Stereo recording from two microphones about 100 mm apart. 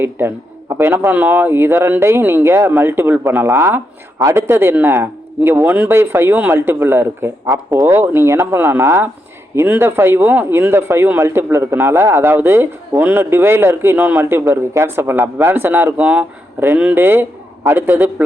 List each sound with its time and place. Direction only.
0.0 s a man's voice: 25° right (ahead or behind)